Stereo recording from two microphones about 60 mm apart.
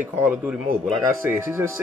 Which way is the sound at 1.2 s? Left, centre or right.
Right.